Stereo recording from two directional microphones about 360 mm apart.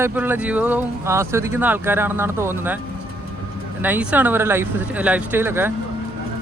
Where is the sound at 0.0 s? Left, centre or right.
Centre.